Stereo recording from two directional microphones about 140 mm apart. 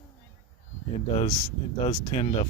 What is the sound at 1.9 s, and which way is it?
Speech, 50° left (ahead or behind).